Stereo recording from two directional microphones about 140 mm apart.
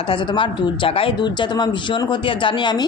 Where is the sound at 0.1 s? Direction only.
35° left (ahead or behind).